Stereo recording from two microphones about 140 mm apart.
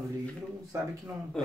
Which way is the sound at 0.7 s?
25° right (ahead or behind).